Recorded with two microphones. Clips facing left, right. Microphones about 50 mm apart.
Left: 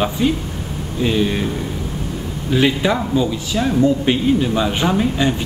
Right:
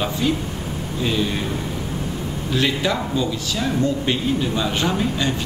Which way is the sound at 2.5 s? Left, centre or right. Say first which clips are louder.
Left 5 dB; centre.